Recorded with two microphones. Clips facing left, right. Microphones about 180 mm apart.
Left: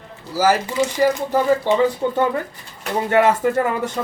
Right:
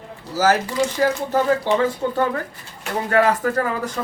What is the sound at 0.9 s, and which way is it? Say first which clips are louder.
Speech: left 3 dB; 10° left (ahead or behind).